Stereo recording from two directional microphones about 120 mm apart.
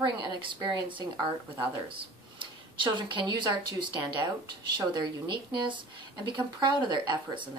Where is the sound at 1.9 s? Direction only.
45° right (ahead or behind).